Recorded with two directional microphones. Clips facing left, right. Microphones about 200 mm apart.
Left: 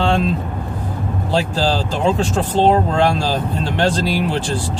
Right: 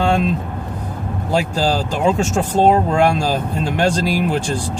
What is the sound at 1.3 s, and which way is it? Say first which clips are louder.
Speech: right 1 dB; 10° right (ahead or behind).